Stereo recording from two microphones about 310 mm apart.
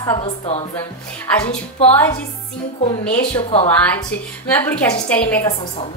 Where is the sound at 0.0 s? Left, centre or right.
Centre.